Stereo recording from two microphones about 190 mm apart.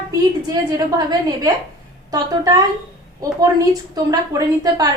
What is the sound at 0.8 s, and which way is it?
A woman's voice, 20° right (ahead or behind).